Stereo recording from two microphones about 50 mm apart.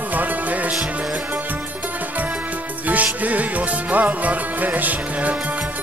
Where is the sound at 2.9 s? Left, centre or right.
Right.